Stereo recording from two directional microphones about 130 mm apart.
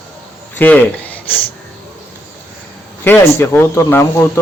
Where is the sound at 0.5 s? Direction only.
15° left (ahead or behind).